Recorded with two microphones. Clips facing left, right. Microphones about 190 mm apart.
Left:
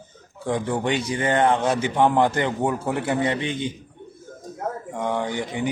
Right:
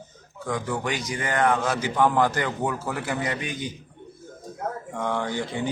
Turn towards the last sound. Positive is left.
turn(degrees=20)  # may be behind; listen again after turning